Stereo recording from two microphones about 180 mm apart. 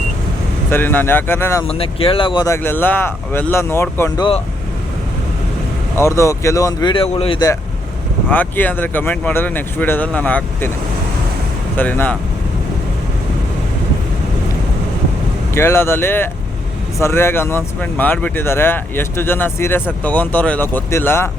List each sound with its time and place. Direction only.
0.7 s speech: 10° left (ahead or behind)
1.6 s speech: 30° left (ahead or behind); by 4.3 s 15° left (ahead or behind)
6.0 s speech: 15° left (ahead or behind)
8.3 s speech: 10° left (ahead or behind)
11.8 s speech: 10° left (ahead or behind)
15.5 s speech: 15° left (ahead or behind)